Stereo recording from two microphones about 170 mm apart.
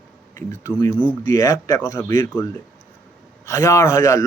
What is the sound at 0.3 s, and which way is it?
A man's voice, 15° left (ahead or behind).